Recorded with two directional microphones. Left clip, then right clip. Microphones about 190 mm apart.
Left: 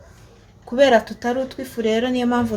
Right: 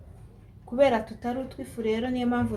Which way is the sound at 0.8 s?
45° left (ahead or behind).